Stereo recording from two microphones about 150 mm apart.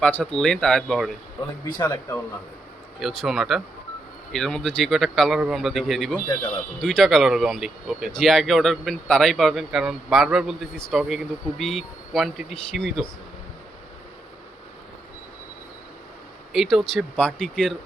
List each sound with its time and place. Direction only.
0.0 s speech: 5° left (ahead or behind)
1.9 s speech: 20° left (ahead or behind)
3.0 s speech: centre (ahead or behind)
16.5 s speech: centre (ahead or behind)